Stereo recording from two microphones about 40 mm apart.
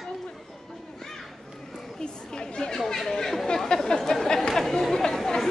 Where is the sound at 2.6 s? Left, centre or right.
Centre.